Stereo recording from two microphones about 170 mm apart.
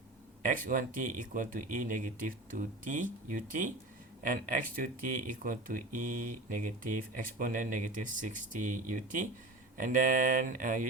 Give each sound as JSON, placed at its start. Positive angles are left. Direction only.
{"t": 0.4, "sound": "speech", "side_deg": -50}